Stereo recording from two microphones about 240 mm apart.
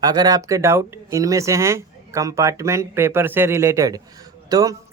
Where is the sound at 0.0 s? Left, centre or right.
Centre.